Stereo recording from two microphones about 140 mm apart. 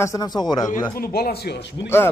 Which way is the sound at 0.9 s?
90° left.